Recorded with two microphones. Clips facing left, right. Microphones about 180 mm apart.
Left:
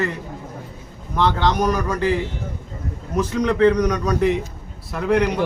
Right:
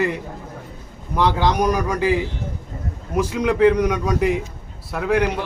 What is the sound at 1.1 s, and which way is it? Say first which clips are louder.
A man's voice: right 1 dB; 10° right (ahead or behind).